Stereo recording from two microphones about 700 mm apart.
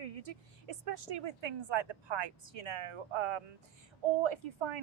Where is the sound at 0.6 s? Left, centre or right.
Right.